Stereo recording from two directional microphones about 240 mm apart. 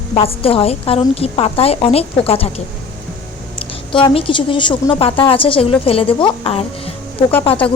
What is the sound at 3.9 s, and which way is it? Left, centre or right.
Speech, left.